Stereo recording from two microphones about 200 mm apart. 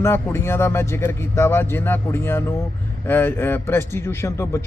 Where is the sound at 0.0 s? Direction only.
10° left (ahead or behind).